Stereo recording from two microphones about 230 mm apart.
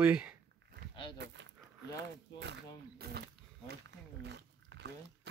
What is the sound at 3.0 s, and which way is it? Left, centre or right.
Wild animals, right.